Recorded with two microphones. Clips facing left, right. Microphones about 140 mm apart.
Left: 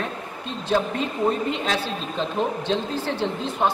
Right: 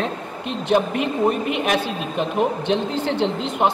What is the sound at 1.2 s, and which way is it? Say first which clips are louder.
A woman's voice: right 1 dB; 15° right (ahead or behind).